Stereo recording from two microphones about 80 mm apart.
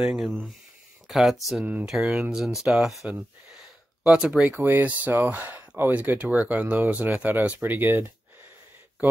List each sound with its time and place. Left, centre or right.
0.0 s speech: centre
3.1 s speech: centre
4.6 s speech: right